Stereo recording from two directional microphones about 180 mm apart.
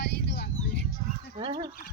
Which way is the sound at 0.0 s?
65° left (ahead or behind).